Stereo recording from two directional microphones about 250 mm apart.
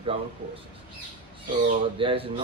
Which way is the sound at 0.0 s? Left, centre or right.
Right.